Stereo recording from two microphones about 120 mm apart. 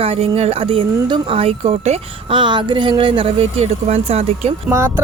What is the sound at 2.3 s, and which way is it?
Speech, 40° right (ahead or behind).